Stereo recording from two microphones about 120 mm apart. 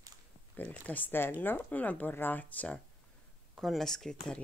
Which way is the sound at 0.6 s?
15° left (ahead or behind).